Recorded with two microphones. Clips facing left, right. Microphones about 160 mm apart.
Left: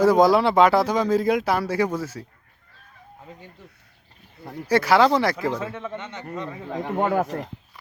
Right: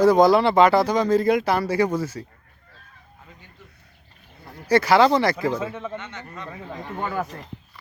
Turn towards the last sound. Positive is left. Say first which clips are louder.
# left 6 dB
turn(degrees=60)  # may be behind; listen again after turning